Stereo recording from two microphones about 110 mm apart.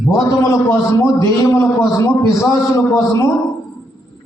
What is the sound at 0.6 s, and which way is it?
A man's voice, 25° left (ahead or behind).